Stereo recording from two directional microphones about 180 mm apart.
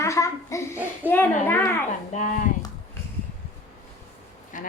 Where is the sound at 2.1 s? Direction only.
40° left (ahead or behind).